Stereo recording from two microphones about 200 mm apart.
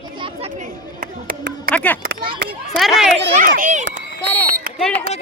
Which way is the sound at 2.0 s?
50° right (ahead or behind).